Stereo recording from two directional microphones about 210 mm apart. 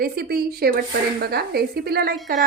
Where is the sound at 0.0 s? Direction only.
45° right (ahead or behind).